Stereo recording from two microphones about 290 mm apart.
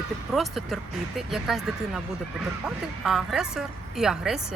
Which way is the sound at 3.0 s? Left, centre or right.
Centre.